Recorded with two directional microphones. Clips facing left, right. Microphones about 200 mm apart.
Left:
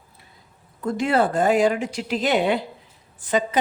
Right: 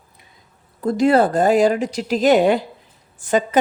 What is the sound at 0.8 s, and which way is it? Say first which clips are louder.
A woman's voice: right 6 dB; 35° right (ahead or behind).